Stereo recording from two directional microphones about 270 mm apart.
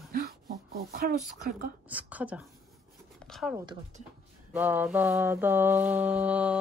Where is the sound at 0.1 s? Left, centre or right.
Right.